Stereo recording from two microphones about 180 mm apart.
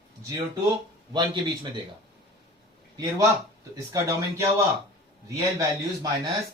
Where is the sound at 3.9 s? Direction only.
20° right (ahead or behind).